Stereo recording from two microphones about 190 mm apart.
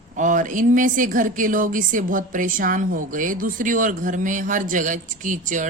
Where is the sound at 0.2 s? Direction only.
45° right (ahead or behind).